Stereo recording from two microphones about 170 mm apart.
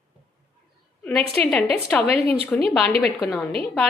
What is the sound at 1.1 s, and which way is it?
A woman's voice, 5° left (ahead or behind).